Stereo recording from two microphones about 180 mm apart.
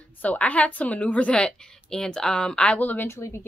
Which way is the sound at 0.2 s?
10° left (ahead or behind).